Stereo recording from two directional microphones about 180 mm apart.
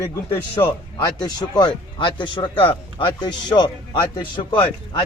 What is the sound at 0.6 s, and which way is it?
Speech, 25° left (ahead or behind).